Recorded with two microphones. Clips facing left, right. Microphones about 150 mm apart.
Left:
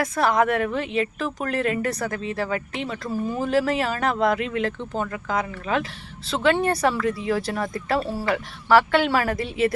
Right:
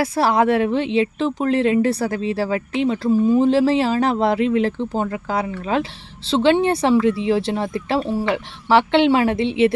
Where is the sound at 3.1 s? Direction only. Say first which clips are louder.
Right 9 dB; 20° right (ahead or behind).